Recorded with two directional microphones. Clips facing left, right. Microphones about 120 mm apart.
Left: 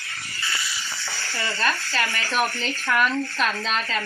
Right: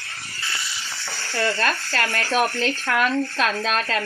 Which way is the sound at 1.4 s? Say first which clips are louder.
Right 4 dB; 60° right (ahead or behind).